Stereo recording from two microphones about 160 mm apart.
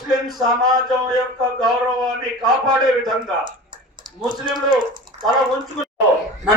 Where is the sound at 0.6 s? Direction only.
25° right (ahead or behind).